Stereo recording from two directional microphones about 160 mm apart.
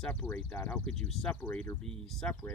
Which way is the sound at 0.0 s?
10° left (ahead or behind).